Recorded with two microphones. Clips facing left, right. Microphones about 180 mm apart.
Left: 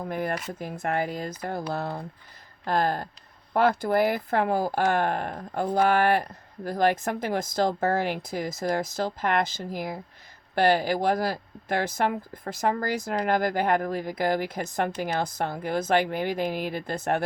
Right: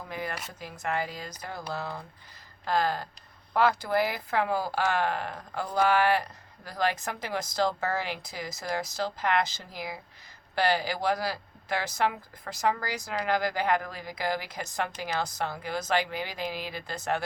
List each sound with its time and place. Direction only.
0.0 s speech: 55° left (ahead or behind)